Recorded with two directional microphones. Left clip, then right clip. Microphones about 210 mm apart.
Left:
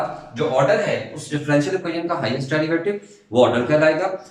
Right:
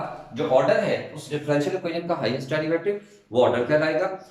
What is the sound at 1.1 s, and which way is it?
Speech, 15° right (ahead or behind).